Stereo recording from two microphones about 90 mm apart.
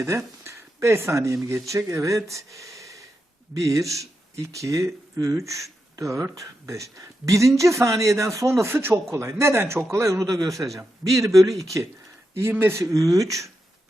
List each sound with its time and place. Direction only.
0.4 s speech: 30° right (ahead or behind)
12.3 s speech: 25° right (ahead or behind)
12.8 s speech: 40° right (ahead or behind)